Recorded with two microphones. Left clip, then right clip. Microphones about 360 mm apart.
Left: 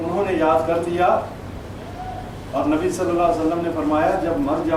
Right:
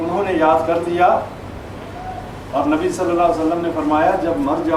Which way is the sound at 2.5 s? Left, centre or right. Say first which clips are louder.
Right 3 dB; centre.